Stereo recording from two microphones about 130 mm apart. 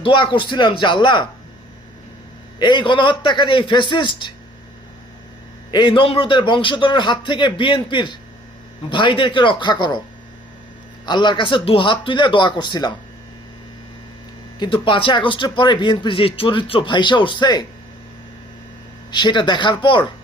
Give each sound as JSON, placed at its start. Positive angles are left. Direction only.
{"t": 0.0, "sound": "speech", "side_deg": 40}
{"t": 2.6, "sound": "speech", "side_deg": 35}
{"t": 5.7, "sound": "speech", "side_deg": 40}
{"t": 11.0, "sound": "speech", "side_deg": 35}
{"t": 14.6, "sound": "speech", "side_deg": 40}
{"t": 19.1, "sound": "speech", "side_deg": 35}